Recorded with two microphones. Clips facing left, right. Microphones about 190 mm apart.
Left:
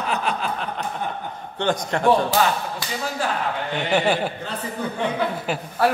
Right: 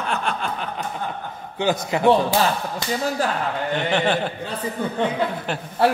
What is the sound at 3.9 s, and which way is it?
Speech, 10° left (ahead or behind).